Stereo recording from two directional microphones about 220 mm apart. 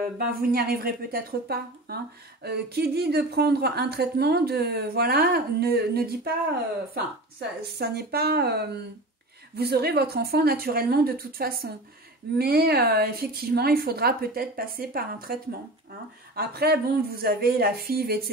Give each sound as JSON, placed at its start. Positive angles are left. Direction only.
{"t": 0.3, "sound": "a woman's voice", "side_deg": -40}
{"t": 16.3, "sound": "a woman's voice", "side_deg": -45}